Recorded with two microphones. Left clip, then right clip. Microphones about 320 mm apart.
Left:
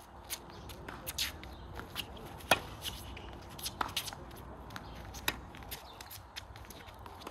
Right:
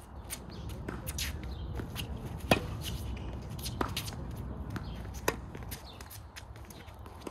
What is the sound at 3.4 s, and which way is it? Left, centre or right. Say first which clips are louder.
Shuffle: right 1 dB; centre.